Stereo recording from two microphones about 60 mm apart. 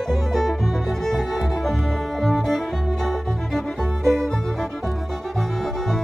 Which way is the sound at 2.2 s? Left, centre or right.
Centre.